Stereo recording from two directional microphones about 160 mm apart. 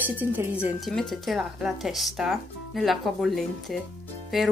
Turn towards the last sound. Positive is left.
turn(degrees=0)  # may be behind; listen again after turning